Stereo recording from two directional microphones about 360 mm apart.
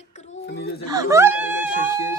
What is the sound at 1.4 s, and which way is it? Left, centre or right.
Speech, left.